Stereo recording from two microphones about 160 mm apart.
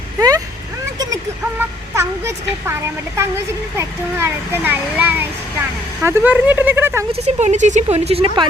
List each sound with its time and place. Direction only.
0.2 s vehicle: 20° right (ahead or behind)
0.9 s a sound: 20° right (ahead or behind)
3.8 s a child's voice: 15° right (ahead or behind)
7.1 s speech: 45° right (ahead or behind)